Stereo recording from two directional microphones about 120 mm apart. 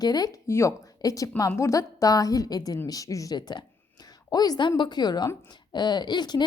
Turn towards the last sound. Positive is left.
turn(degrees=35)  # may be behind; listen again after turning